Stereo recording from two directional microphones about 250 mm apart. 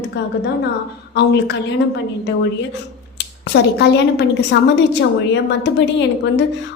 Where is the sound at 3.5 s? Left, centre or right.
Left.